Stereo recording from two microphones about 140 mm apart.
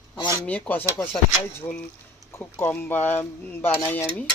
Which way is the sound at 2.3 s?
15° left (ahead or behind).